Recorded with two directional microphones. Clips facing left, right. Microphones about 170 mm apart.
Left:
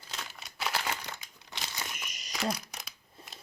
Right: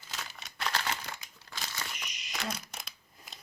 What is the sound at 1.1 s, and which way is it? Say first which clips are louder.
Crumpling: even; 20° left (ahead or behind).